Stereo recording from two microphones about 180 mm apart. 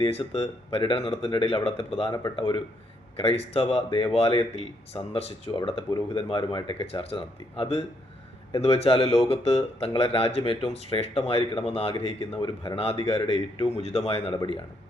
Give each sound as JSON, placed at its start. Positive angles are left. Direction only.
{"t": 0.0, "sound": "speech", "side_deg": 35}